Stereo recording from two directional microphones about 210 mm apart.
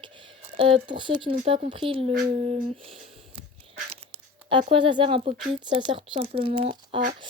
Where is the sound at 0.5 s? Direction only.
25° right (ahead or behind).